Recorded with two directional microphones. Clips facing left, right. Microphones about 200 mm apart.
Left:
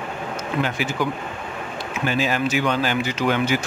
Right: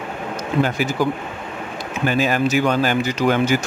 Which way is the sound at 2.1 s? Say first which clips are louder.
Right 4 dB; 50° right (ahead or behind).